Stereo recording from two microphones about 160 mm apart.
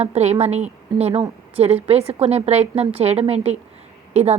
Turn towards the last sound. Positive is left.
turn(degrees=-40)  # may be behind; listen again after turning